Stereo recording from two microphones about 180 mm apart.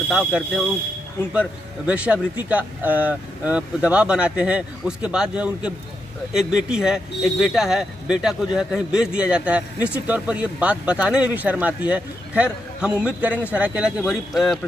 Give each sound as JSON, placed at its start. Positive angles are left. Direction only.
{"t": 0.1, "sound": "speech", "side_deg": -5}